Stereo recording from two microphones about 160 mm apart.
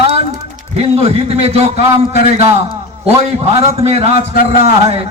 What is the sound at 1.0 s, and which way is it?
Speech, 40° right (ahead or behind).